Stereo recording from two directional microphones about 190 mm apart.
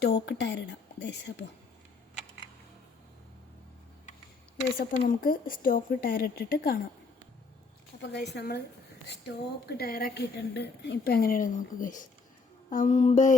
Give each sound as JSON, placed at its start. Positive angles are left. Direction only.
{"t": 0.0, "sound": "a woman's voice", "side_deg": 60}
{"t": 4.8, "sound": "a woman's voice", "side_deg": 50}
{"t": 8.3, "sound": "a woman's voice", "side_deg": 55}
{"t": 12.7, "sound": "mantra", "side_deg": 40}